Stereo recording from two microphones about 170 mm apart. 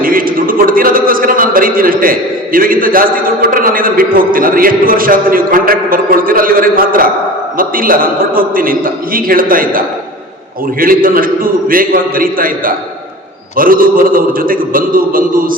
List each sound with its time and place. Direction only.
0.0 s a man's voice: 55° right (ahead or behind)